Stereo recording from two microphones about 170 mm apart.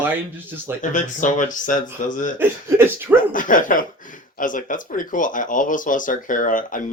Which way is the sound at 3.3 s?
50° left (ahead or behind).